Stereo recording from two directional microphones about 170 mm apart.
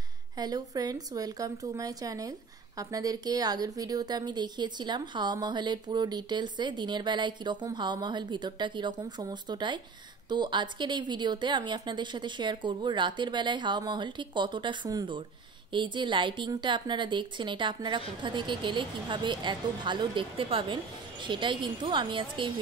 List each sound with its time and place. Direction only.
0.4 s a woman's voice: 25° right (ahead or behind)